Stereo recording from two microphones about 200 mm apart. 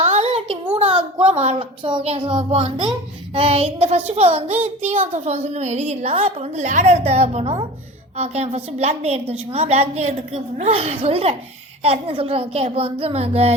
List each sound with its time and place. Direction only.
0.0 s a woman's voice: 35° right (ahead or behind)